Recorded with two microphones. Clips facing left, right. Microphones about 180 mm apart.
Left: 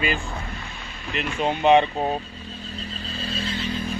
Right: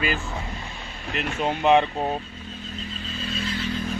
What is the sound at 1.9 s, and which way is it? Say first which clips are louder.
Vehicle: left 1 dB; 35° left (ahead or behind).